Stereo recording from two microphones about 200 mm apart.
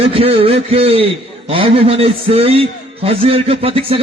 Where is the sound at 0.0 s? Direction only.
30° right (ahead or behind).